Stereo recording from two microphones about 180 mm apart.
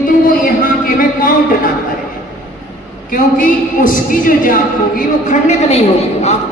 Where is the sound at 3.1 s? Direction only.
50° left (ahead or behind).